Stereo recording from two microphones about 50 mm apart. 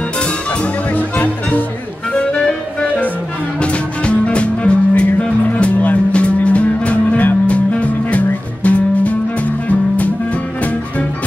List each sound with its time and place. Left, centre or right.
0.9 s music: left
3.6 s music: left